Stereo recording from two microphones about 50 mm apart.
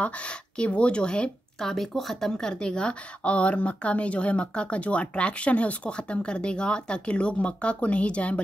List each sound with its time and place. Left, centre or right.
0.0 s a woman's voice: left
1.6 s a woman's voice: centre; by 8.4 s left